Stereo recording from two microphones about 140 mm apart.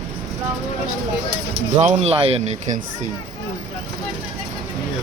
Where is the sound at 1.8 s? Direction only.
50° right (ahead or behind).